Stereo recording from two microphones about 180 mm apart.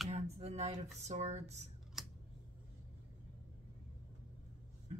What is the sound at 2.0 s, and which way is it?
Scissors, centre (ahead or behind).